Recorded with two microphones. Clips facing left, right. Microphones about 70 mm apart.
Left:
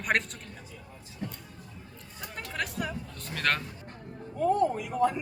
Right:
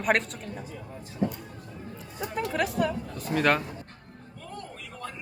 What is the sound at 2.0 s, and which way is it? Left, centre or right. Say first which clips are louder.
Speech: right 10 dB; centre.